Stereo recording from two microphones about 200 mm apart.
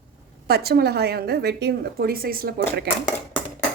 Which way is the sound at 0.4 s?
50° right (ahead or behind).